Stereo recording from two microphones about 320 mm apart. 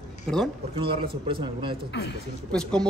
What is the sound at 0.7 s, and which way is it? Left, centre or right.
Speech, centre.